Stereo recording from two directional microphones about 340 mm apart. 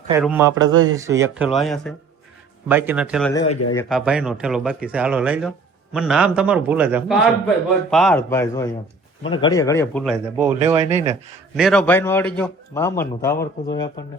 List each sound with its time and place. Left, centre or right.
0.1 s a man's voice: centre
10.7 s speech: centre
11.5 s a man's voice: centre